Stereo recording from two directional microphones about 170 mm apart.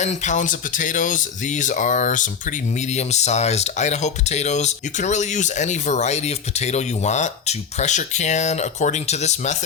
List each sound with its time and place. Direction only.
0.0 s speech: 45° left (ahead or behind)